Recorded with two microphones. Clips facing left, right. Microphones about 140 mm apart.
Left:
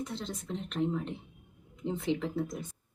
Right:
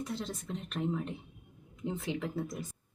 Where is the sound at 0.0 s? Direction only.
Centre (ahead or behind).